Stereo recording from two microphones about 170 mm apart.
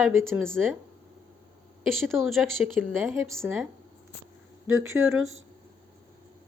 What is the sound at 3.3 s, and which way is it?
Speech, 15° right (ahead or behind).